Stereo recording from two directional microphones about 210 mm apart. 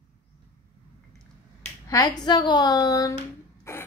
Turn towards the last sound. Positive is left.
turn(degrees=15)  # may be behind; listen again after turning